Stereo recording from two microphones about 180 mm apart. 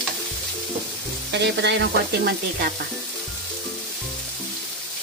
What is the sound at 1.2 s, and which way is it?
Sizzle, 75° right (ahead or behind).